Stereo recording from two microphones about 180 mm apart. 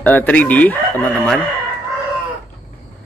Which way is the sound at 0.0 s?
10° left (ahead or behind).